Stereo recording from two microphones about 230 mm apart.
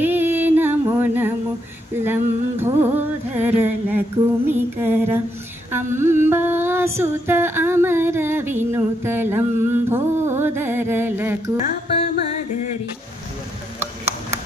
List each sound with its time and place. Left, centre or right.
0.0 s a sound: centre
4.5 s mantra: centre
5.7 s music: centre
12.0 s music: left